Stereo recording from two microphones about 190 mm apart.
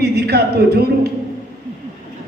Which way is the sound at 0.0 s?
55° right (ahead or behind).